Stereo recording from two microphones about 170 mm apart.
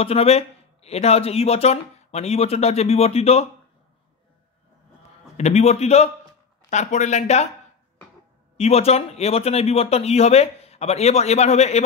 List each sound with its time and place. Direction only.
0.0 s speech: 35° left (ahead or behind)
5.4 s speech: 40° left (ahead or behind)
8.5 s speech: 35° left (ahead or behind)